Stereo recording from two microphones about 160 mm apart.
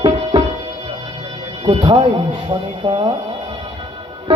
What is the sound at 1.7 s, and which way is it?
Speech, 30° right (ahead or behind).